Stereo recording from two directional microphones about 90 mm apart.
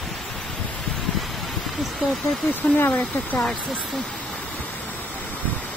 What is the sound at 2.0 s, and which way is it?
Speech, 15° left (ahead or behind).